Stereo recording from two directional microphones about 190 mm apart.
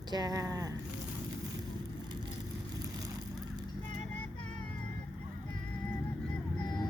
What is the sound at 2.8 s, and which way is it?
Vehicle, 20° right (ahead or behind).